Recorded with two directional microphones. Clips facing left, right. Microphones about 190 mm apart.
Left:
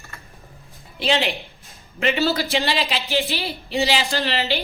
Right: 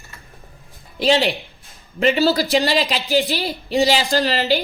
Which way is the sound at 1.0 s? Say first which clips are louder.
Right 5 dB; 40° right (ahead or behind).